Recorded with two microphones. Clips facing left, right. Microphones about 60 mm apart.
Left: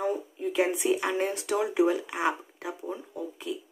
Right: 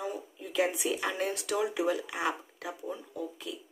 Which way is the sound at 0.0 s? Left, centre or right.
Left.